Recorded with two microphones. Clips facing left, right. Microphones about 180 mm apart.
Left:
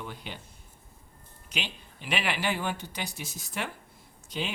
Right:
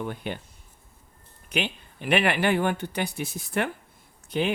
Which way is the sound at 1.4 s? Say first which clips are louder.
Right 8 dB; 55° right (ahead or behind).